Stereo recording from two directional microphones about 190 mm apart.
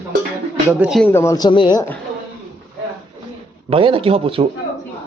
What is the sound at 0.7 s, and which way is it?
Speech, 5° right (ahead or behind).